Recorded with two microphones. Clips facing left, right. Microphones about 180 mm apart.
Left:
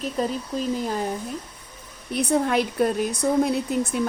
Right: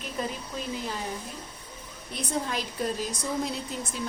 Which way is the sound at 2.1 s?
65° left (ahead or behind).